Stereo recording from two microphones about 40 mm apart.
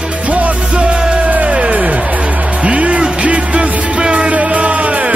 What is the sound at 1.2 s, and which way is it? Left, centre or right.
Music, right.